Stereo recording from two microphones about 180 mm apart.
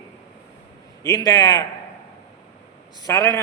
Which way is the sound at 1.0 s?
20° left (ahead or behind).